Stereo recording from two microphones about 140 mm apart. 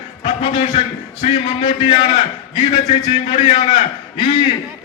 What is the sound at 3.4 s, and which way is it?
A man's voice, 35° left (ahead or behind).